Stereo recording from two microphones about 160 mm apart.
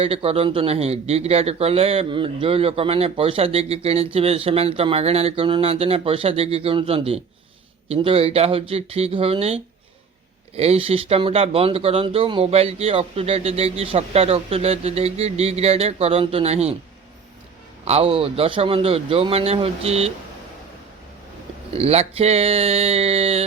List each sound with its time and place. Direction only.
0.0 s speech: 35° right (ahead or behind)
17.8 s speech: 35° right (ahead or behind)
21.7 s speech: 40° right (ahead or behind)